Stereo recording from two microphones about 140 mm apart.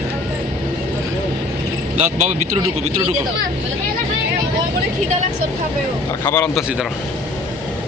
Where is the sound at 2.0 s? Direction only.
60° right (ahead or behind).